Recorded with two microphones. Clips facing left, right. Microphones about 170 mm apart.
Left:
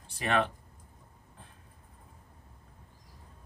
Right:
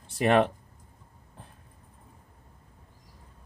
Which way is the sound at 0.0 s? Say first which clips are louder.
Right 7 dB; 35° right (ahead or behind).